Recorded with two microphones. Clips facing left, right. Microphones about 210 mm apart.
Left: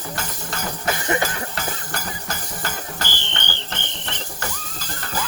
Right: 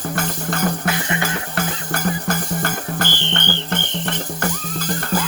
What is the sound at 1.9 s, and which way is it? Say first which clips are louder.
Music: right 9 dB; 55° right (ahead or behind).